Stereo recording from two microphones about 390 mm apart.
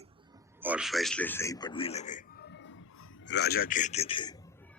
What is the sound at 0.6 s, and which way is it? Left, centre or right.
A man's voice, centre.